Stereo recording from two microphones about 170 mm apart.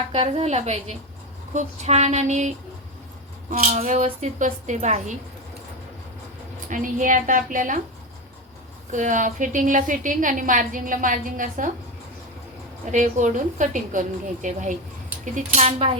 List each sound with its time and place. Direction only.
0.1 s a woman's voice: 35° right (ahead or behind)
3.5 s a woman's voice: 45° right (ahead or behind)
6.7 s a woman's voice: 50° right (ahead or behind)
8.9 s a woman's voice: 50° right (ahead or behind)
12.8 s a woman's voice: 45° right (ahead or behind)